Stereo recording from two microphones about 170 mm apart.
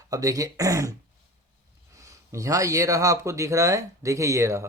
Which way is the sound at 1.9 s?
20° right (ahead or behind).